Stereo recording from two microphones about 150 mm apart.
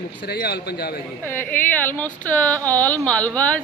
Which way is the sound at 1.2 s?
15° left (ahead or behind).